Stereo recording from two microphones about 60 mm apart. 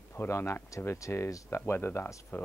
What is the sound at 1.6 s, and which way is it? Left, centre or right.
Speech, left.